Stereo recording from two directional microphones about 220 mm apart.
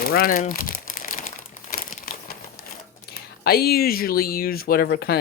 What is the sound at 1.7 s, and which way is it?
Crumpling, 40° left (ahead or behind).